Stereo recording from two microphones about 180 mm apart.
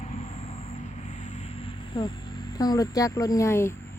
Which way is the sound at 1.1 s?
40° left (ahead or behind).